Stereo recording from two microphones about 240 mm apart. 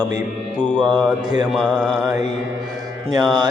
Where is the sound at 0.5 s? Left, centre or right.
Centre.